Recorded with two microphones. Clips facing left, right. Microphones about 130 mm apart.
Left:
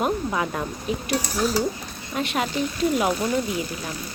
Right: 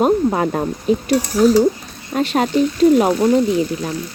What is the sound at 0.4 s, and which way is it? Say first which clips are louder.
Speech: right 9 dB; 45° right (ahead or behind).